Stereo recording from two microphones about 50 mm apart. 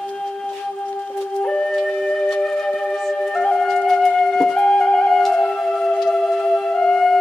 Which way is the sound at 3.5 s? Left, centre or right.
Centre.